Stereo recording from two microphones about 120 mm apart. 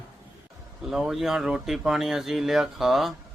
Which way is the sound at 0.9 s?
5° right (ahead or behind).